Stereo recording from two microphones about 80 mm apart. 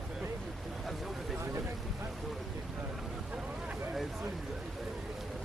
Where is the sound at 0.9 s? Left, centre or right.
Centre.